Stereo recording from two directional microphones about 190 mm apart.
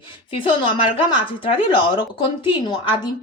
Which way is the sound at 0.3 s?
25° left (ahead or behind).